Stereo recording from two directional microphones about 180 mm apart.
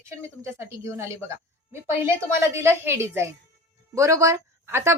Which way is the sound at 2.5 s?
15° right (ahead or behind).